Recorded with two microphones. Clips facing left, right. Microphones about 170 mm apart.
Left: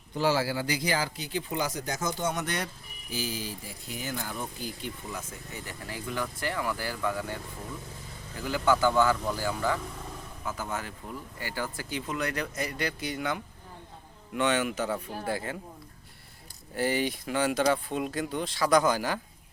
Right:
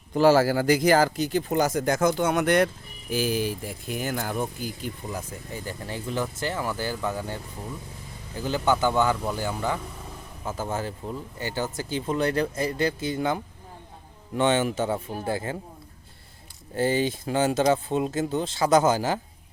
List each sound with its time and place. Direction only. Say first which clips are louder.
0.1 s speech: right 8 dB; 45° right (ahead or behind)
5.1 s speech: right 5 dB; 30° right (ahead or behind)
8.4 s speech: right 2 dB; 25° right (ahead or behind)
16.7 s speech: right 4 dB; 25° right (ahead or behind)